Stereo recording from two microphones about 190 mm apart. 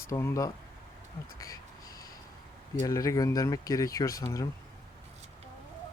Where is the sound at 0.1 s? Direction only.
15° left (ahead or behind).